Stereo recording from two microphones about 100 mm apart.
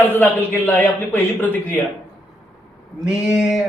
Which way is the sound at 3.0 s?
5° right (ahead or behind).